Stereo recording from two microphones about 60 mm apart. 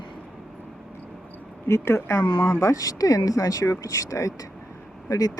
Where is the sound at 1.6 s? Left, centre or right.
Left.